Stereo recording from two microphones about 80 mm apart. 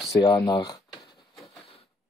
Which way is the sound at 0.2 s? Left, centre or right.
Left.